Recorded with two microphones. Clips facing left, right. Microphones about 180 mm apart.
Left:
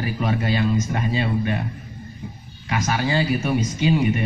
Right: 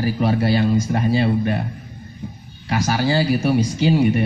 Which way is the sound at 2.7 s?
35° right (ahead or behind).